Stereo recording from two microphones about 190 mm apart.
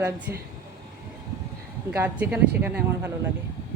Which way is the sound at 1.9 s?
10° right (ahead or behind).